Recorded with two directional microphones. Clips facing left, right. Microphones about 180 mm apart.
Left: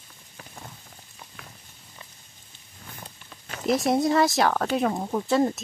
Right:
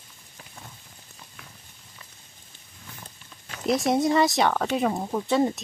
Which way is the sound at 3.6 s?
Centre (ahead or behind).